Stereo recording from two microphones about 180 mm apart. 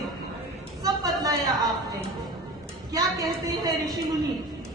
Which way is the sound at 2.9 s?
20° right (ahead or behind).